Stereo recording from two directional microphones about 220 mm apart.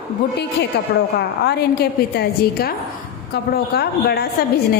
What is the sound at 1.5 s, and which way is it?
A woman's voice, 50° left (ahead or behind).